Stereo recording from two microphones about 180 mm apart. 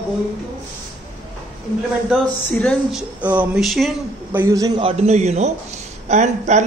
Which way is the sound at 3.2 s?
10° right (ahead or behind).